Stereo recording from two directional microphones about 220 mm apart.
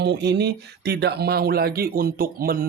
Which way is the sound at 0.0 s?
50° right (ahead or behind).